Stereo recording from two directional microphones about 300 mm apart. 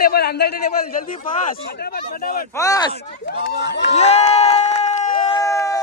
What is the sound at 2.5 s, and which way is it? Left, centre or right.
Speech, centre.